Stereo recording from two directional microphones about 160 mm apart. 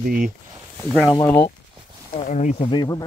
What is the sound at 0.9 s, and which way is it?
Speech, centre (ahead or behind).